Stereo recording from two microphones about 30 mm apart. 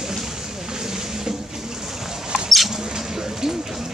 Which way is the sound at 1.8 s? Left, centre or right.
Centre.